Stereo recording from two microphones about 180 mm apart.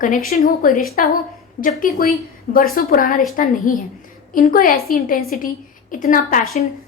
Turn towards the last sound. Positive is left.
turn(degrees=45)  # may be behind; listen again after turning